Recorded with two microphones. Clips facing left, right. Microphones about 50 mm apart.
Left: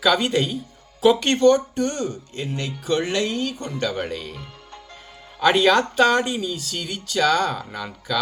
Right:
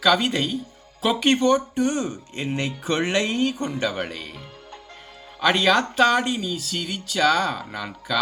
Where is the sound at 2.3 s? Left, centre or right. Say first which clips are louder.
Right 2 dB; right.